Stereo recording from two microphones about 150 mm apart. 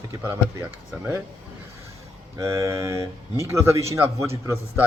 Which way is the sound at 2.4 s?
20° right (ahead or behind).